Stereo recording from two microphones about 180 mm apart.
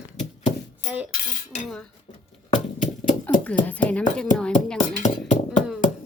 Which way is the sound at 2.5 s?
45° left (ahead or behind).